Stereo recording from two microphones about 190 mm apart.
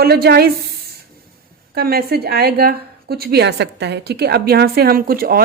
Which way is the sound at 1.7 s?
55° right (ahead or behind).